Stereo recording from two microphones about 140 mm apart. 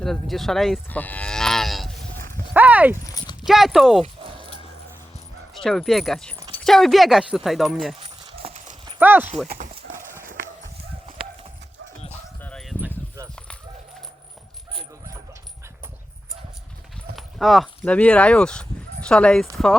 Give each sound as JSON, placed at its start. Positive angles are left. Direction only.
{"t": 0.0, "sound": "speech", "side_deg": 0}
{"t": 0.9, "sound": "moo", "side_deg": 10}
{"t": 2.5, "sound": "clip-clop", "side_deg": -10}
{"t": 3.0, "sound": "a sound", "side_deg": 25}
{"t": 3.4, "sound": "speech", "side_deg": 0}
{"t": 5.5, "sound": "speech", "side_deg": 0}
{"t": 7.9, "sound": "keys jangling", "side_deg": -40}
{"t": 9.0, "sound": "speech", "side_deg": -15}
{"t": 9.5, "sound": "clip-clop", "side_deg": -70}
{"t": 12.4, "sound": "a sound", "side_deg": 5}
{"t": 17.2, "sound": "speech", "side_deg": 0}